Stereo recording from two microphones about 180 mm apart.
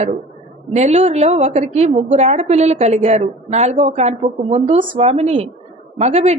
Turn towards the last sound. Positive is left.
turn(degrees=-35)  # may be behind; listen again after turning